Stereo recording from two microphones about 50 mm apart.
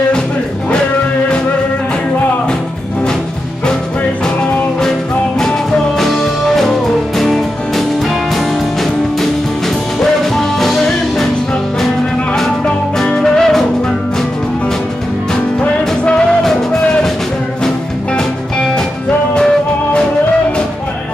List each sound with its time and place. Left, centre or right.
5.9 s music: centre
9.9 s music: centre
13.0 s music: centre
15.6 s music: left
19.3 s music: centre